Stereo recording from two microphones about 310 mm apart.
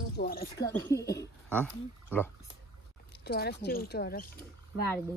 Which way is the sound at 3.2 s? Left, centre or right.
Left.